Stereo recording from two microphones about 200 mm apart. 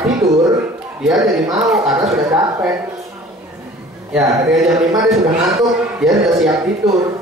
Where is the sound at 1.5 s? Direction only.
Centre (ahead or behind).